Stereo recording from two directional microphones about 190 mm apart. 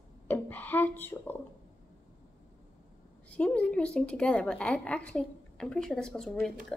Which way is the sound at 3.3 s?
5° left (ahead or behind).